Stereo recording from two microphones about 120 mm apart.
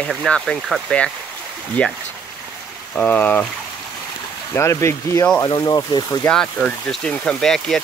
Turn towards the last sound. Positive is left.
turn(degrees=5)  # may be behind; listen again after turning